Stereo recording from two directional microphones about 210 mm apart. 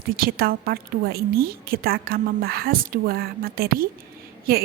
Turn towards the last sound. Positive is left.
turn(degrees=-45)  # may be behind; listen again after turning